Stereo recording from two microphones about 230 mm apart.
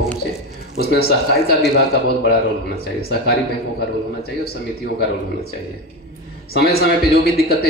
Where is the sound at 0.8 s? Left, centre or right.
Left.